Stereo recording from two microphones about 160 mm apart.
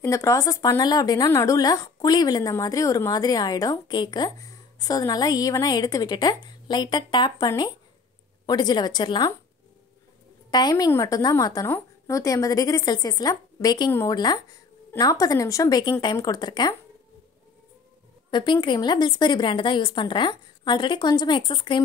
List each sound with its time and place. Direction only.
0.0 s a woman's voice: 20° left (ahead or behind)
10.5 s a woman's voice: 25° left (ahead or behind)
18.3 s a woman's voice: 30° left (ahead or behind)